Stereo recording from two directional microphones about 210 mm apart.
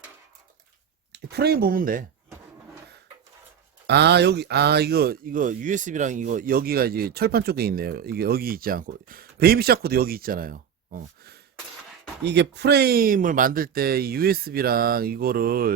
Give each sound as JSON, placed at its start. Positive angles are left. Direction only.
{"t": 1.1, "sound": "speech", "side_deg": -50}
{"t": 3.8, "sound": "speech", "side_deg": -50}